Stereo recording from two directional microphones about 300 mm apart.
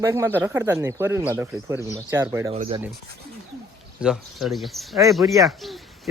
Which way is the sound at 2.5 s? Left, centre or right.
Right.